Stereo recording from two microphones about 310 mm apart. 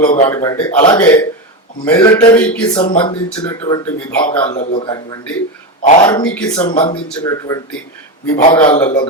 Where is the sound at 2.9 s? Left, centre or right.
Centre.